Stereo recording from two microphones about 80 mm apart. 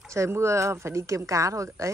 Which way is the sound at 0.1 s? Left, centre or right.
Right.